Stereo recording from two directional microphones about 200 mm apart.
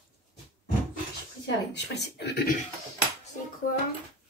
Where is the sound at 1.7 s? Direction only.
55° left (ahead or behind).